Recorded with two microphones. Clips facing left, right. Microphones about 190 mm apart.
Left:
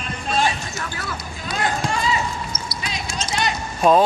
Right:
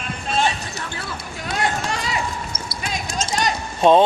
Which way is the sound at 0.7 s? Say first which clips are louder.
Left 1 dB; 30° right (ahead or behind).